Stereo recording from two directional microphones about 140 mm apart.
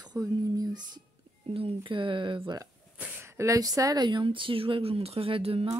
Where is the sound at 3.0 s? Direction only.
15° right (ahead or behind).